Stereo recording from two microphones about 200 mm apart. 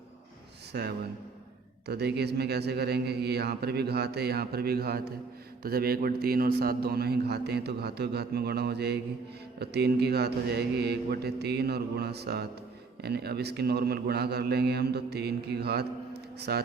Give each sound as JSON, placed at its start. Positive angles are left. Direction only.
{"t": 0.7, "sound": "a man's voice", "side_deg": -55}